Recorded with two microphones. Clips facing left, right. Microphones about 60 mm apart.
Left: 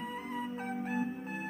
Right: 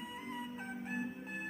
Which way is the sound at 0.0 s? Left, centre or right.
Left.